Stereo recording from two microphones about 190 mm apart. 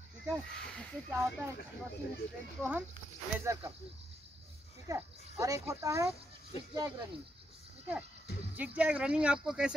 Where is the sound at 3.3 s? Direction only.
15° right (ahead or behind).